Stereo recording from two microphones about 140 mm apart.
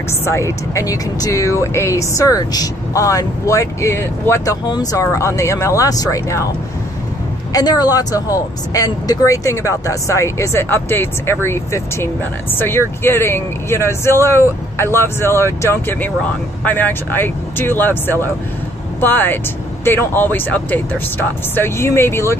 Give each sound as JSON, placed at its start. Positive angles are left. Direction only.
{"t": 0.2, "sound": "speech", "side_deg": 20}
{"t": 7.5, "sound": "speech", "side_deg": 30}